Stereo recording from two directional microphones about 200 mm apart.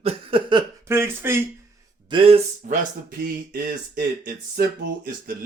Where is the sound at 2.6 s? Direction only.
45° right (ahead or behind).